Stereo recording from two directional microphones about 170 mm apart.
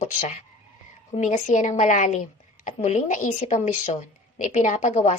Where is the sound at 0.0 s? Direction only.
45° left (ahead or behind).